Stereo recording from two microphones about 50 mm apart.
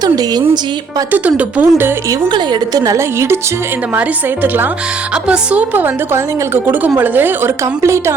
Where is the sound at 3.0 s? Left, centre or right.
Right.